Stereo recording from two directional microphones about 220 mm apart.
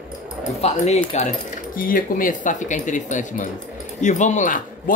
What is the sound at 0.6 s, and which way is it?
Speech, 30° left (ahead or behind).